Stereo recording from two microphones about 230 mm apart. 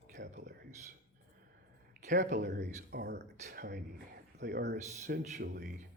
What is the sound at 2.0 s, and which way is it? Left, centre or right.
Speech, right.